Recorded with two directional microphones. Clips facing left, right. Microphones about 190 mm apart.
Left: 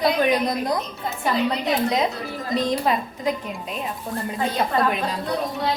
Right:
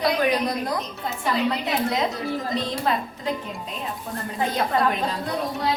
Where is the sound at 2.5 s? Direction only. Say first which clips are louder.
Left 7 dB; 15° left (ahead or behind).